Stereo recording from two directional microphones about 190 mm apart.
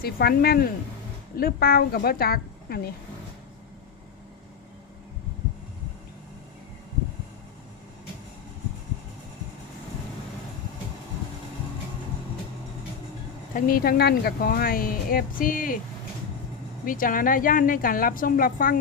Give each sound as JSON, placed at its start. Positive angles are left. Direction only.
{"t": 0.0, "sound": "speech", "side_deg": 50}
{"t": 13.5, "sound": "speech", "side_deg": 50}
{"t": 16.8, "sound": "speech", "side_deg": 45}